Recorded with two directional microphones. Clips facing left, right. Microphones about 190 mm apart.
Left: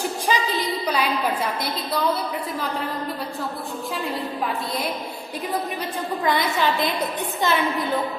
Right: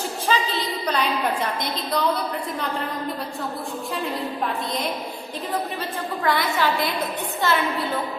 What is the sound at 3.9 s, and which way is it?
Speech, centre (ahead or behind).